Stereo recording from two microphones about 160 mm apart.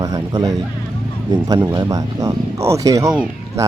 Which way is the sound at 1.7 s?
20° right (ahead or behind).